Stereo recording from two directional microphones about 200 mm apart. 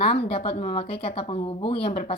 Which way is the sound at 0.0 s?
30° left (ahead or behind).